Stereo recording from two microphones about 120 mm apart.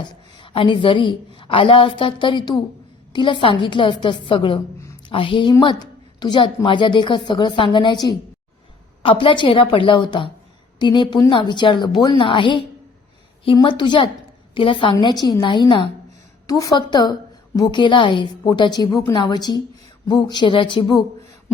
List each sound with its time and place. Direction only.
0.0 s a woman's voice: 45° left (ahead or behind)
9.0 s a woman's voice: 45° left (ahead or behind)
16.5 s a woman's voice: 30° left (ahead or behind)
19.1 s a woman's voice: 40° left (ahead or behind)